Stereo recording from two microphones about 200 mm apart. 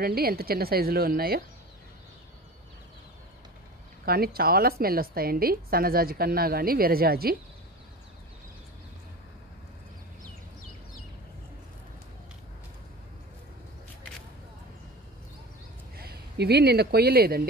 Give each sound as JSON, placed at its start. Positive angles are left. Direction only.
{"t": 0.0, "sound": "a woman's voice", "side_deg": -50}
{"t": 4.0, "sound": "a woman's voice", "side_deg": -50}
{"t": 16.0, "sound": "speech", "side_deg": -50}